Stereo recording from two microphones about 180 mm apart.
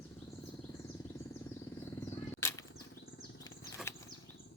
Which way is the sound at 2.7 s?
60° left (ahead or behind).